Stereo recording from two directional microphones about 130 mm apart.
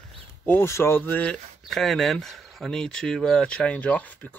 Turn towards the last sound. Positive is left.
turn(degrees=10)  # may be behind; listen again after turning